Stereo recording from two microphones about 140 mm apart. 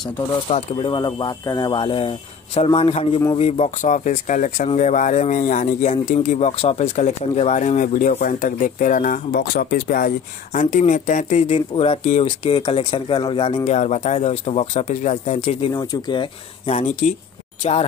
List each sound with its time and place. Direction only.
0.7 s speech: 30° left (ahead or behind); by 12.5 s 50° left (ahead or behind)
12.5 s speech: 35° left (ahead or behind)
13.7 s speech: 55° left (ahead or behind)
15.7 s speech: 30° left (ahead or behind)
16.6 s speech: 55° left (ahead or behind)